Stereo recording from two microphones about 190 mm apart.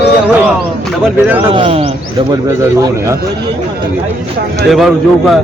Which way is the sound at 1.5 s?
30° right (ahead or behind).